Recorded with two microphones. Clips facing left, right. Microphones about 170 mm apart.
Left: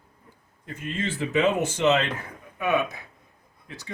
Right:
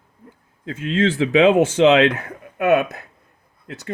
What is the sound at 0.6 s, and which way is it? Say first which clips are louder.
Speech: right 11 dB; 90° right.